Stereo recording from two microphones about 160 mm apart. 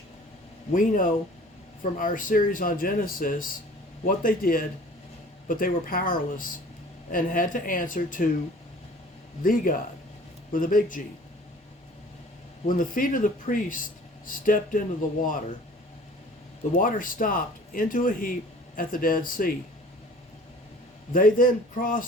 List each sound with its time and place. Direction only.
0.7 s speech: 55° left (ahead or behind)
9.4 s speech: 60° left (ahead or behind)
12.6 s speech: 60° left (ahead or behind)
16.7 s speech: 60° left (ahead or behind)
21.1 s speech: 60° left (ahead or behind)